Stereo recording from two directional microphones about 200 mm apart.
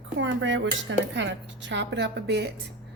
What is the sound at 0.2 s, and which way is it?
Speech, 65° right (ahead or behind).